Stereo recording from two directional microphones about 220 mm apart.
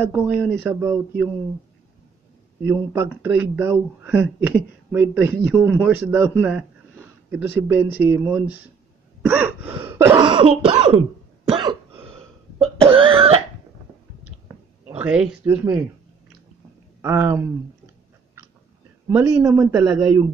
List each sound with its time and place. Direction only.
0.0 s speech: 10° right (ahead or behind)
2.6 s speech: 10° right (ahead or behind)
7.4 s speech: 10° right (ahead or behind)
11.5 s cough: 25° right (ahead or behind)
15.0 s speech: 5° right (ahead or behind)
17.0 s speech: 10° right (ahead or behind)
19.0 s speech: 10° right (ahead or behind)